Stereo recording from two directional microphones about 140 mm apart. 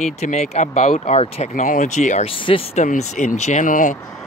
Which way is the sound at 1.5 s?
65° left (ahead or behind).